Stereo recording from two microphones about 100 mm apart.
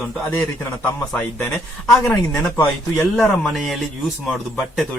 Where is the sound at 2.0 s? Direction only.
5° left (ahead or behind).